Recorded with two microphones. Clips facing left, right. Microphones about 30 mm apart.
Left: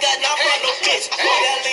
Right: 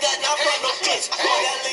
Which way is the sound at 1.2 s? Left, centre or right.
Left.